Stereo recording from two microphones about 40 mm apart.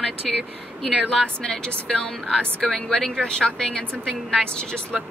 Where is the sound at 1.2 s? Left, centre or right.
Centre.